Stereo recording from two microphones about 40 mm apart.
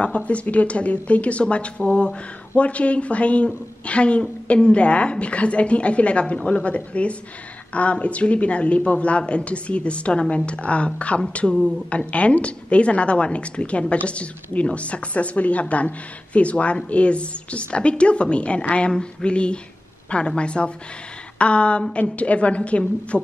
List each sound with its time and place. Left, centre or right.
0.0 s a woman's voice: left